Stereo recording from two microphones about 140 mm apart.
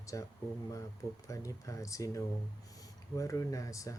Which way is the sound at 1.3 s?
25° left (ahead or behind).